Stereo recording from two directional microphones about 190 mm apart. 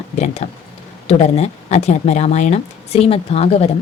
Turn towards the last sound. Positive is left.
turn(degrees=35)  # may be behind; listen again after turning